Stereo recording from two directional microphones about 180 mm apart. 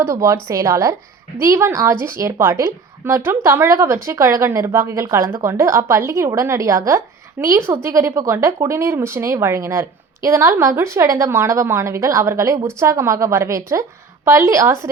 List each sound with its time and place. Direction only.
0.0 s a woman's voice: 15° right (ahead or behind)